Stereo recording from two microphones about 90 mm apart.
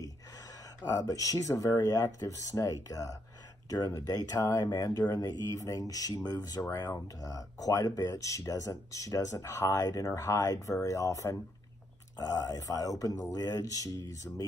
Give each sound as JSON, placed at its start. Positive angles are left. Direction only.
{"t": 0.8, "sound": "speech", "side_deg": 35}